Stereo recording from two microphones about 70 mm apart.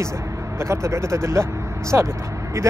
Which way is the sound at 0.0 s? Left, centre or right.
Right.